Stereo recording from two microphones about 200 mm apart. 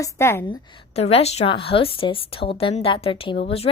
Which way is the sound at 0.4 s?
25° left (ahead or behind).